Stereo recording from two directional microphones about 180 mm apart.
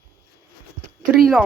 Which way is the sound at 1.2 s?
Centre (ahead or behind).